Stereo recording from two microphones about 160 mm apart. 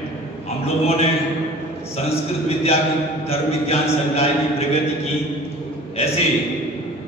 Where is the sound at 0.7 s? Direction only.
40° left (ahead or behind).